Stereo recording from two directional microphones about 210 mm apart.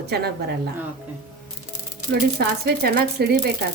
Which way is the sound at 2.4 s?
50° right (ahead or behind).